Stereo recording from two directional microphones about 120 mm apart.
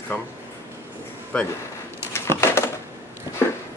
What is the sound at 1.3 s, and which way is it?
Speech, 10° left (ahead or behind).